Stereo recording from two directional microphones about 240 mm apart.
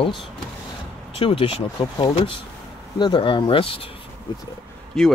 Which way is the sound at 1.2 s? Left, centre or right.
Left.